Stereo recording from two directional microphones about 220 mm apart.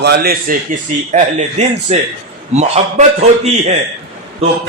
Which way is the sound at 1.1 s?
30° right (ahead or behind).